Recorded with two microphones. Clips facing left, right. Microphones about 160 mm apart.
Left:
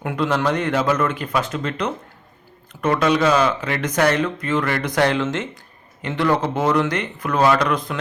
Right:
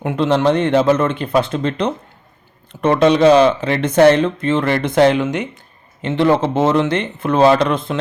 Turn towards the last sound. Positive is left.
turn(degrees=-25)  # may be behind; listen again after turning